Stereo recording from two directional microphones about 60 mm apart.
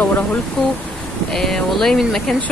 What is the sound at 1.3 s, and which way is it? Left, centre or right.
Speech, centre.